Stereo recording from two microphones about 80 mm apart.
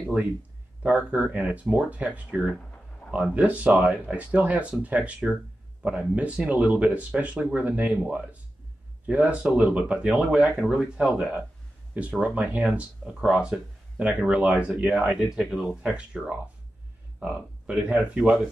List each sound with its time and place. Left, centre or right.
0.8 s speech: centre